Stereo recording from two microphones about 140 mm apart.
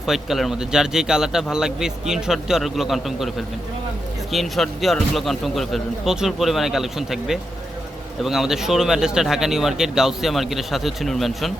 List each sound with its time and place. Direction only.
0.0 s speech: centre (ahead or behind)